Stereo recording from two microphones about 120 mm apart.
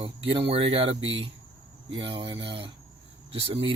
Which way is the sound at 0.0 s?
50° right (ahead or behind).